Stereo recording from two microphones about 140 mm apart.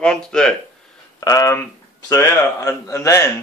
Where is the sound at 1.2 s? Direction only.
25° left (ahead or behind).